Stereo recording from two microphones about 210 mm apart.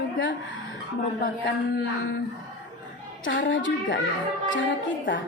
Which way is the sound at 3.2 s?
60° left (ahead or behind).